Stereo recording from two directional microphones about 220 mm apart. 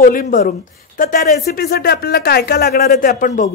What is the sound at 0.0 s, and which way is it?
Speech, 40° left (ahead or behind).